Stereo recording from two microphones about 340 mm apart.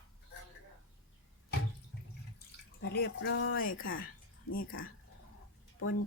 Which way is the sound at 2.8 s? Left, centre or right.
Left.